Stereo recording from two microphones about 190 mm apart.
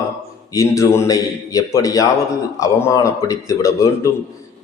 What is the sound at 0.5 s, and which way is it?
A man's voice, 15° left (ahead or behind).